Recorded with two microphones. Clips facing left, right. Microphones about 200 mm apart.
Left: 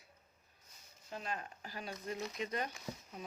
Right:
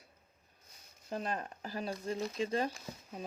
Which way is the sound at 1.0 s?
40° right (ahead or behind).